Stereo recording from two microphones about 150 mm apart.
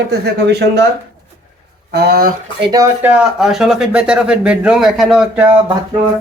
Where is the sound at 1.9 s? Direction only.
90° right.